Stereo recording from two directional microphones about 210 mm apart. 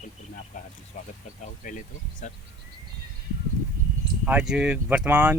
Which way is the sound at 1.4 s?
40° left (ahead or behind).